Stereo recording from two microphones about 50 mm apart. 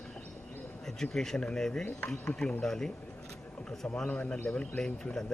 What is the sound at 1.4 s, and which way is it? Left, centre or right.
A man's voice, centre.